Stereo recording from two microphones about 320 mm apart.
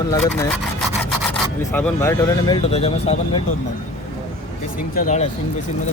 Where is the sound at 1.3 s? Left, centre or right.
Centre.